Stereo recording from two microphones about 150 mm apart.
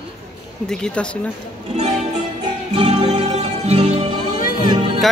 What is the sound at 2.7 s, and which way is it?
Music, 45° right (ahead or behind).